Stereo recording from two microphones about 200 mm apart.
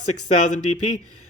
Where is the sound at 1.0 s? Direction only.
90° left.